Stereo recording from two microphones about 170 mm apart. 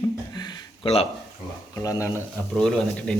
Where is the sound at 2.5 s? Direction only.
5° left (ahead or behind).